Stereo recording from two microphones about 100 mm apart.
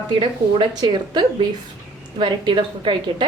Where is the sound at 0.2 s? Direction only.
55° right (ahead or behind).